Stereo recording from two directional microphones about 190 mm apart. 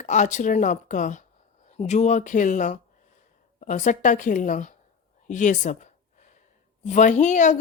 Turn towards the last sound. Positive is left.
turn(degrees=40)  # may be behind; listen again after turning